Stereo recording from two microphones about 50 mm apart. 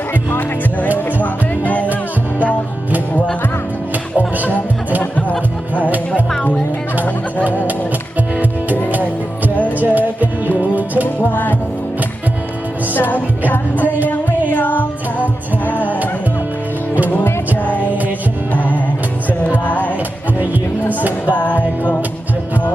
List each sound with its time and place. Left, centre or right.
0.1 s speech: left
0.9 s music: left
5.1 s music: left
8.9 s music: right
9.6 s music: left
10.6 s music: right
11.3 s music: left
12.9 s music: left
17.1 s music: left
19.6 s music: left
21.2 s music: left